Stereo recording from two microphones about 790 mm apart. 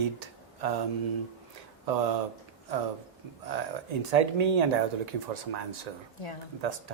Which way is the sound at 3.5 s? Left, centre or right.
Right.